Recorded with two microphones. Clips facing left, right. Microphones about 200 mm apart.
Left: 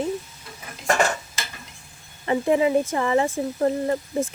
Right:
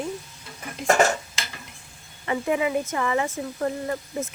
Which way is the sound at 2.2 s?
30° left (ahead or behind).